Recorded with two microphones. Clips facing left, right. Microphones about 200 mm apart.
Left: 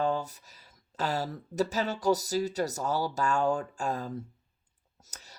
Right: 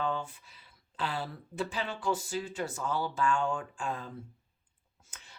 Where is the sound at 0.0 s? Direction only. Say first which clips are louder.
Left 4 dB; 40° left (ahead or behind).